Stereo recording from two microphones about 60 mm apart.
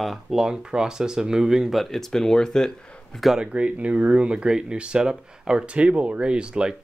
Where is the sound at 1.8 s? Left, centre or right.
Centre.